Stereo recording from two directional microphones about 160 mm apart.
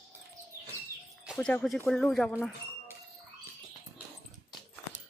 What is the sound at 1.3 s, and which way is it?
Speech, 5° left (ahead or behind).